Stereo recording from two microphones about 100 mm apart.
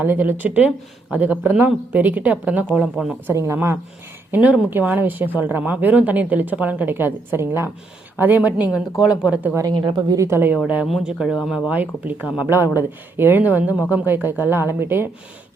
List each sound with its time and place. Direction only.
0.0 s speech: 20° right (ahead or behind)
3.3 s speech: 25° right (ahead or behind)
4.3 s speech: 15° right (ahead or behind)
9.6 s a woman's voice: 40° right (ahead or behind)
10.2 s speech: 25° right (ahead or behind)
10.8 s speech: 5° right (ahead or behind)
11.7 s speech: 15° right (ahead or behind)